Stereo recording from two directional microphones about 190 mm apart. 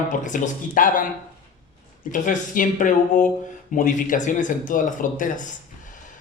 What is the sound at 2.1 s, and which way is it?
Speech, 45° left (ahead or behind).